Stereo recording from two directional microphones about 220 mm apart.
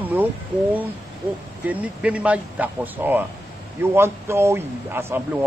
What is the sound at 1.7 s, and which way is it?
Speech, 5° right (ahead or behind).